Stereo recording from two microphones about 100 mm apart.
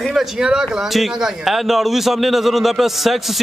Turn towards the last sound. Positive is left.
turn(degrees=0)  # may be behind; listen again after turning